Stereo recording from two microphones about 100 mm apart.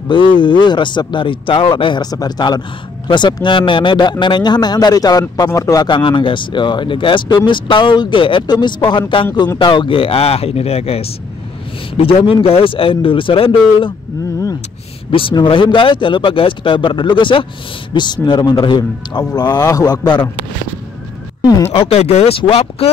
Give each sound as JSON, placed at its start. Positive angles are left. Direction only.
{"t": 0.1, "sound": "speech", "side_deg": 55}
{"t": 5.9, "sound": "speech", "side_deg": 55}
{"t": 12.0, "sound": "speech", "side_deg": 70}
{"t": 15.0, "sound": "speech", "side_deg": 60}
{"t": 17.9, "sound": "speech", "side_deg": 45}
{"t": 21.6, "sound": "speech", "side_deg": 85}